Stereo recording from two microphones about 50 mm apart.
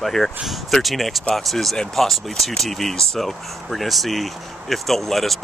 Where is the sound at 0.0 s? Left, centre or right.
Centre.